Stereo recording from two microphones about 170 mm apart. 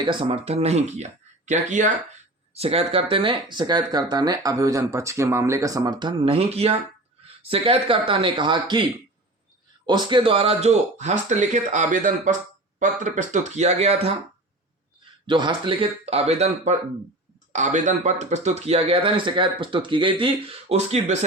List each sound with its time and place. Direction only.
0.0 s speech: 30° right (ahead or behind); by 1.9 s 45° right (ahead or behind)
2.6 s speech: 35° right (ahead or behind)
15.3 s speech: 30° right (ahead or behind)